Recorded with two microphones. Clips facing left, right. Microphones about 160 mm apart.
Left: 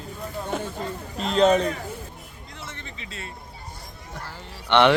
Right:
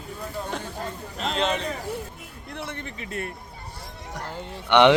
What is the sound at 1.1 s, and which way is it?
Speech, 40° left (ahead or behind).